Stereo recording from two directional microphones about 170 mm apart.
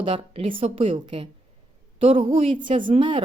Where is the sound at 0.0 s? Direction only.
35° right (ahead or behind).